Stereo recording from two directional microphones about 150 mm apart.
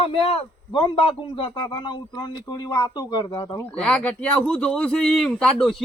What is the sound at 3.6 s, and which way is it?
A man's voice, 10° left (ahead or behind).